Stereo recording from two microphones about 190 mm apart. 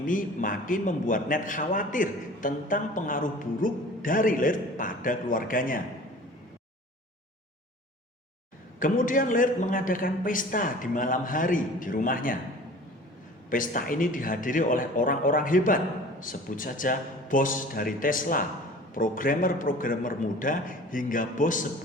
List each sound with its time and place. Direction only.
0.0 s a man's voice: 45° left (ahead or behind)
8.8 s a man's voice: 45° left (ahead or behind)
13.5 s a man's voice: 45° left (ahead or behind)